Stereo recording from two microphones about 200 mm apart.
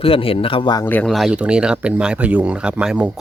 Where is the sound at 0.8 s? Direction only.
10° left (ahead or behind).